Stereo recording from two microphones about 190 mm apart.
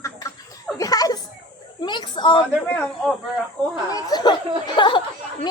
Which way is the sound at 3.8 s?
20° left (ahead or behind).